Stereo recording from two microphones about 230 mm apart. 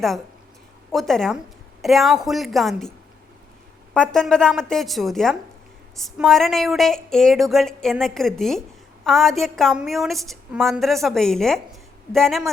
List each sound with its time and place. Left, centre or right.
0.9 s a woman's voice: centre
3.9 s a woman's voice: centre